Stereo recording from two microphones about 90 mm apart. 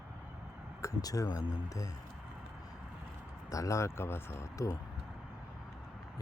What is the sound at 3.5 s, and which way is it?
Speech, 35° left (ahead or behind).